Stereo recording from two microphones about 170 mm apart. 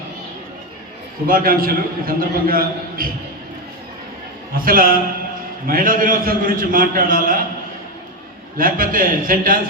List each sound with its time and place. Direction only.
1.3 s a man's voice: 55° right (ahead or behind)
4.5 s a man's voice: 55° right (ahead or behind)
8.5 s a man's voice: 55° right (ahead or behind)